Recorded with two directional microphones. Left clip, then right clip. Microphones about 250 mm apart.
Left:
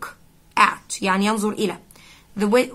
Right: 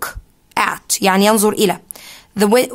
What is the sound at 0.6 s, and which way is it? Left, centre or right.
A woman's voice, right.